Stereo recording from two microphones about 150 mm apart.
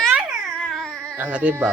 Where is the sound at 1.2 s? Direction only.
10° right (ahead or behind).